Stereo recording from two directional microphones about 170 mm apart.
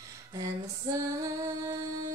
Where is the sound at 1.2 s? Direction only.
20° right (ahead or behind).